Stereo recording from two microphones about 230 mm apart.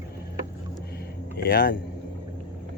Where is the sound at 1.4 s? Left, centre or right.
Left.